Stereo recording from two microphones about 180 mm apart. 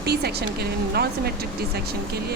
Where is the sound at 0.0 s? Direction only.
65° right (ahead or behind).